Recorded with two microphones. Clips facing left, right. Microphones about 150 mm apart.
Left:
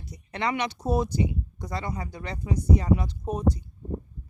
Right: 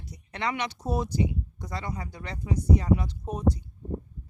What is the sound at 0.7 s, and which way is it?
Speech, 40° left (ahead or behind).